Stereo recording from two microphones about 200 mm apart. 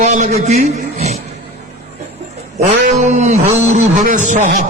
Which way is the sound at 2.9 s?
35° right (ahead or behind).